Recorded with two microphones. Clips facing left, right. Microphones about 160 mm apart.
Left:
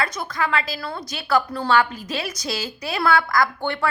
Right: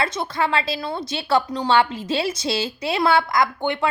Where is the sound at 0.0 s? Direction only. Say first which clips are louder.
Right 2 dB; 25° right (ahead or behind).